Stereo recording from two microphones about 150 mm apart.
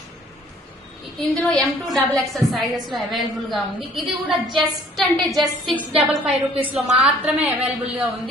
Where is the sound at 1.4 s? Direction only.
Centre (ahead or behind).